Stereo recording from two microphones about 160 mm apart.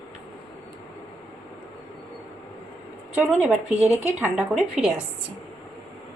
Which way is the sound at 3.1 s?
5° right (ahead or behind).